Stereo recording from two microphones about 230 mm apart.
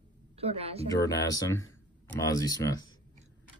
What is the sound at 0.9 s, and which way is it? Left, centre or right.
Speech, centre.